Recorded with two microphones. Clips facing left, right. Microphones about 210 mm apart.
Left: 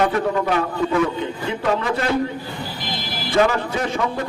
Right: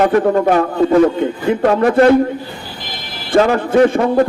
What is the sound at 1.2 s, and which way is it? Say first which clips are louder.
Speech: right 10 dB; 55° right (ahead or behind).